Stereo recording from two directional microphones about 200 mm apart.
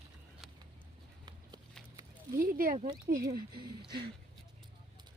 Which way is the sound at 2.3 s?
45° right (ahead or behind).